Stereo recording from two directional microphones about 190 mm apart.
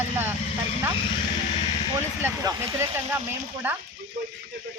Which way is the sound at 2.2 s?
15° right (ahead or behind).